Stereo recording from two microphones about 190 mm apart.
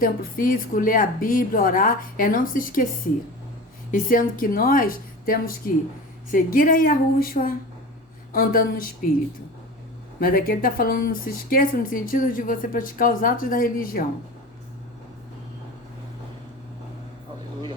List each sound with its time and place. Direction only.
0.0 s speech: 45° left (ahead or behind)
3.9 s speech: 45° left (ahead or behind)
10.2 s speech: 50° left (ahead or behind)